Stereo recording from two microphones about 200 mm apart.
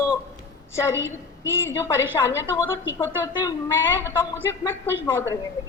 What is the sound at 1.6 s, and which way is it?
Speech, 15° left (ahead or behind).